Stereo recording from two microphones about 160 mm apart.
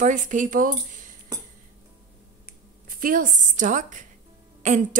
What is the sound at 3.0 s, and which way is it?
A woman's voice, 55° right (ahead or behind).